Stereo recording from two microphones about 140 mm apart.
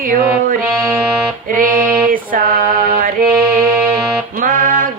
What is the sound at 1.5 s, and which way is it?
Music, 80° right.